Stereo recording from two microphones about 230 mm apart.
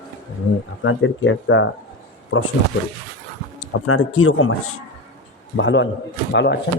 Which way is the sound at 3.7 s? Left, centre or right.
Left.